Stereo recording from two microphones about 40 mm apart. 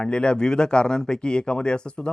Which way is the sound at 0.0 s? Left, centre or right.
Left.